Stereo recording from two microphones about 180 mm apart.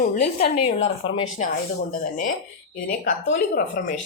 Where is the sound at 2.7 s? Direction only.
45° left (ahead or behind).